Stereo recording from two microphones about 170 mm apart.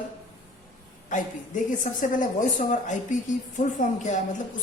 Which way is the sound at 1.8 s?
50° left (ahead or behind).